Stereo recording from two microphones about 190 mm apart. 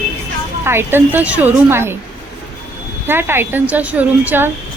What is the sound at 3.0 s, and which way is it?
Speech, 10° right (ahead or behind).